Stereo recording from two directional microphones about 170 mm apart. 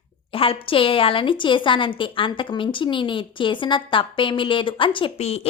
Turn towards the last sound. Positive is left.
turn(degrees=35)  # may be behind; listen again after turning